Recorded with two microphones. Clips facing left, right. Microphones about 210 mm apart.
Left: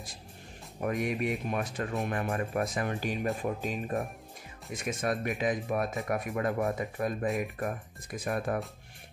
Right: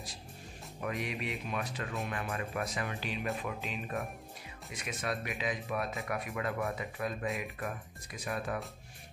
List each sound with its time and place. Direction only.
0.7 s speech: 45° left (ahead or behind)